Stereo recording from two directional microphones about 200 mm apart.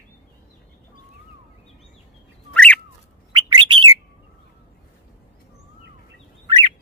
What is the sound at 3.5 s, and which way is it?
Bird, 20° right (ahead or behind).